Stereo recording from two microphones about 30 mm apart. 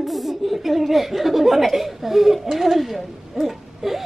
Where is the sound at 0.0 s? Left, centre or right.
Centre.